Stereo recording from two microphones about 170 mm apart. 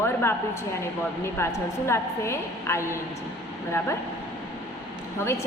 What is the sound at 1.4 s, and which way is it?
A woman's voice, 15° left (ahead or behind).